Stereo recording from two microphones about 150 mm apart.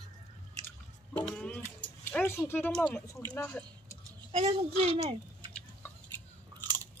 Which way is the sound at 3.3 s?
10° left (ahead or behind).